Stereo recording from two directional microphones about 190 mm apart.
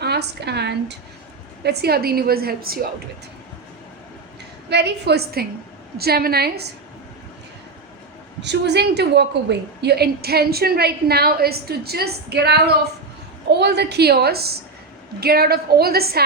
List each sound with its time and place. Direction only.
0.0 s a woman's voice: 60° right (ahead or behind)
4.7 s a woman's voice: 60° right (ahead or behind)
8.4 s a woman's voice: 65° right (ahead or behind)